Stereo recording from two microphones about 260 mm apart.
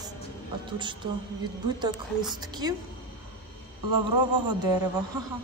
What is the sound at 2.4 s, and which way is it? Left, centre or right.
Speech, centre.